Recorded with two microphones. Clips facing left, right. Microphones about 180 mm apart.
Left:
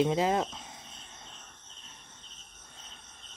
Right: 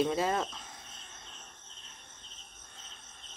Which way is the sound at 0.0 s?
15° left (ahead or behind).